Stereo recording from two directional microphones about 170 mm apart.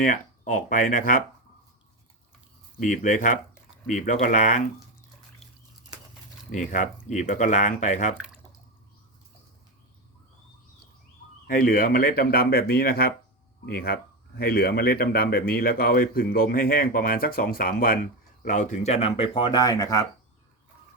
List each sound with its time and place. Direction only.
0.0 s speech: 50° left (ahead or behind)
2.7 s speech: 50° left (ahead or behind)
6.5 s speech: 45° left (ahead or behind)
11.4 s speech: 55° left (ahead or behind)
18.4 s speech: 45° left (ahead or behind); by 20.1 s 20° left (ahead or behind)